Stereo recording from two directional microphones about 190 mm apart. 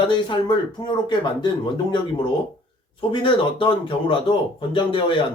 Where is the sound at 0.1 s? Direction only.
25° left (ahead or behind).